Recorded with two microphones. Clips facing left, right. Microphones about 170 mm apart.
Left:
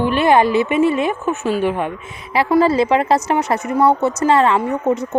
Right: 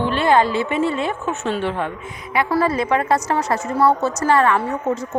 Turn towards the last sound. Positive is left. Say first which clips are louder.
# left 4 dB
turn(degrees=20)  # may be behind; listen again after turning